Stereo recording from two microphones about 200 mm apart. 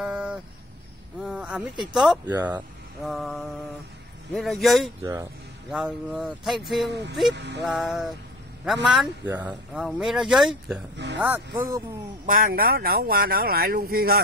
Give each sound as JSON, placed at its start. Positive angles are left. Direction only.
{"t": 0.0, "sound": "a sound", "side_deg": -5}
{"t": 1.2, "sound": "speech", "side_deg": -5}
{"t": 5.0, "sound": "speech", "side_deg": -15}
{"t": 5.7, "sound": "speech", "side_deg": -5}
{"t": 7.3, "sound": "speech", "side_deg": -60}
{"t": 7.6, "sound": "speech", "side_deg": 0}
{"t": 11.1, "sound": "speech", "side_deg": -10}
{"t": 12.3, "sound": "speech", "side_deg": -45}